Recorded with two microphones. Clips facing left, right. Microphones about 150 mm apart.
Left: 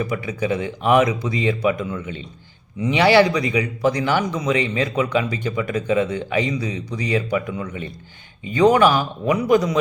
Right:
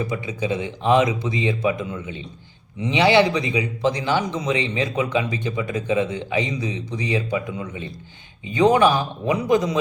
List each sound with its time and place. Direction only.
0.0 s speech: 25° right (ahead or behind)